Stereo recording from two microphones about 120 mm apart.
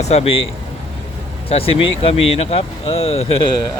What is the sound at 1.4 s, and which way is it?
Speech, 55° left (ahead or behind).